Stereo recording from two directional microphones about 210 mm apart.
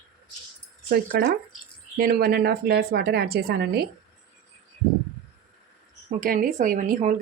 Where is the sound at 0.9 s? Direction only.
45° right (ahead or behind).